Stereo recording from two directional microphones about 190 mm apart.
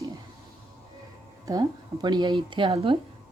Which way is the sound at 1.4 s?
20° right (ahead or behind).